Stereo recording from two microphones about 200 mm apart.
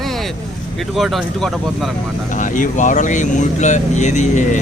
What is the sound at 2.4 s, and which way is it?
Speech, 40° left (ahead or behind).